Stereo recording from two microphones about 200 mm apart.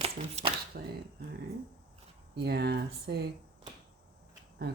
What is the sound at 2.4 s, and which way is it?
Speech, 55° right (ahead or behind).